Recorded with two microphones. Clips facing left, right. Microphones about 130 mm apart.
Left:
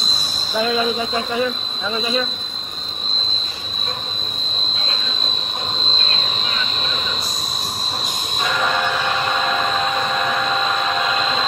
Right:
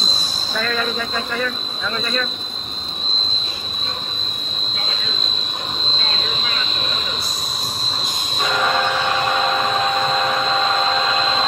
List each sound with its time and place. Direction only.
0.6 s speech: 15° left (ahead or behind)